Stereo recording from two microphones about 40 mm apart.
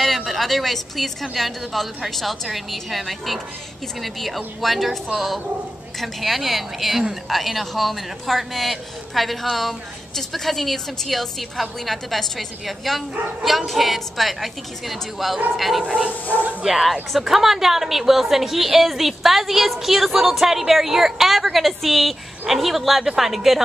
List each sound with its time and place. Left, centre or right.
0.0 s a woman's voice: centre
15.8 s speech: right
16.6 s a woman's voice: centre